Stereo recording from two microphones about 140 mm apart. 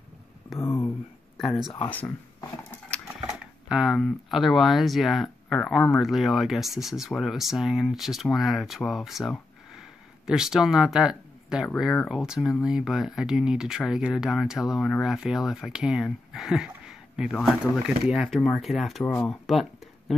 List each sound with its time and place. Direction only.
0.6 s a sound: 20° left (ahead or behind)
1.9 s speech: 10° left (ahead or behind)
3.6 s speech: 5° right (ahead or behind)